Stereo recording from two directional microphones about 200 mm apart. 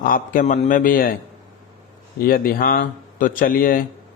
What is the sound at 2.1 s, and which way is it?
Speech, 45° left (ahead or behind).